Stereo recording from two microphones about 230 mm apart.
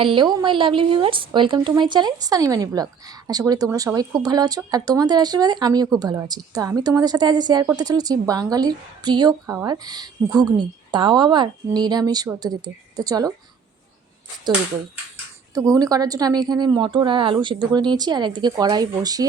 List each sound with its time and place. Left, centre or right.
0.0 s a woman's voice: right
15.5 s speech: centre